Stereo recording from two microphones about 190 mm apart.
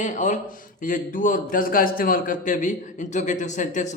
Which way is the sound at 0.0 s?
40° left (ahead or behind).